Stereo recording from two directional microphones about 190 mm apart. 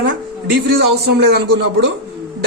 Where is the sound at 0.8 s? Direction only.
60° right (ahead or behind).